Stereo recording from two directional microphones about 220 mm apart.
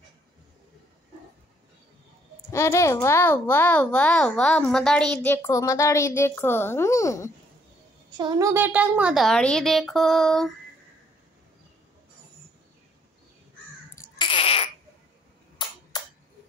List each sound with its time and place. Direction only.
2.5 s a child's voice: 15° left (ahead or behind)
8.2 s a child's voice: 15° right (ahead or behind); by 10.5 s centre (ahead or behind)
13.9 s babbling: 15° left (ahead or behind)
15.6 s a sound: 20° left (ahead or behind)